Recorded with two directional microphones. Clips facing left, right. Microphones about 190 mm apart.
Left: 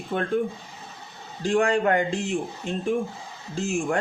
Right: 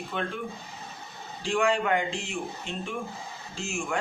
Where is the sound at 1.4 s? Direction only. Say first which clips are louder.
Left 4 dB; 45° left (ahead or behind).